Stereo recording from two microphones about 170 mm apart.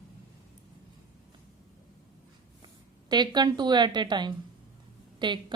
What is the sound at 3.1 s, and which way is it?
A woman's voice, 25° right (ahead or behind).